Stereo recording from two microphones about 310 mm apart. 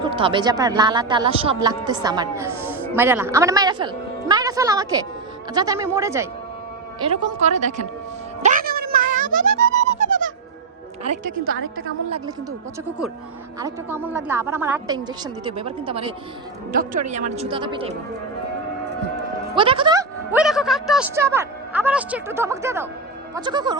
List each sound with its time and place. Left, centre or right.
0.0 s a woman's voice: centre
7.0 s speech: centre
8.4 s a sound: right
9.4 s music: right
9.8 s music: right
11.3 s a woman's voice: right
12.1 s a woman's voice: centre
13.6 s a woman's voice: centre
19.5 s a woman's voice: centre